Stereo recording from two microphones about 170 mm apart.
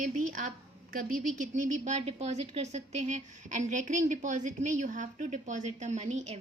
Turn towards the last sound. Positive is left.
turn(degrees=-40)  # may be behind; listen again after turning